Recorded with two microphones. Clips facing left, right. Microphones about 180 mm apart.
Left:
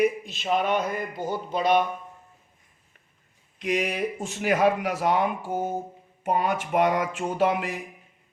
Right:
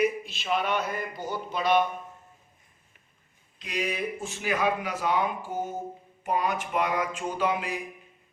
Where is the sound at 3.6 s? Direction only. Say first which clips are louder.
Left 6 dB; 70° left (ahead or behind).